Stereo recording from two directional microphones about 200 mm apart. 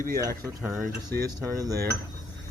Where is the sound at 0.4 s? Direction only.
15° right (ahead or behind).